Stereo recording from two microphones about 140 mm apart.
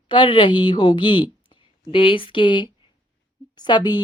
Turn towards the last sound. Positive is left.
turn(degrees=30)  # may be behind; listen again after turning